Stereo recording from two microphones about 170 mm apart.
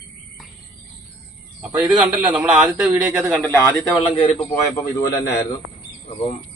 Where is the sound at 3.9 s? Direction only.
30° left (ahead or behind).